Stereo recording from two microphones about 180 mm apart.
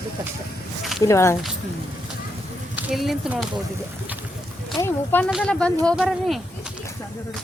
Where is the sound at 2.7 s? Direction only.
Centre (ahead or behind).